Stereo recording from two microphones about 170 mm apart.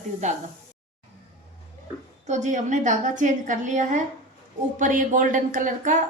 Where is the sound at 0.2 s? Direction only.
45° right (ahead or behind).